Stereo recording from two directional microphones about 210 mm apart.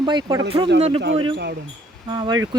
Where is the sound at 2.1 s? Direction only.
20° right (ahead or behind).